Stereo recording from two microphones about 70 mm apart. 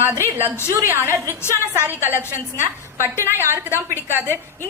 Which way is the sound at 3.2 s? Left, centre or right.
Right.